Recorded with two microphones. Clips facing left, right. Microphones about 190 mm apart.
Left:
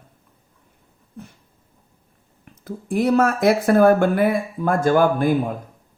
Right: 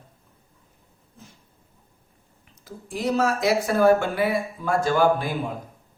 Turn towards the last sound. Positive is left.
turn(degrees=50)  # may be behind; listen again after turning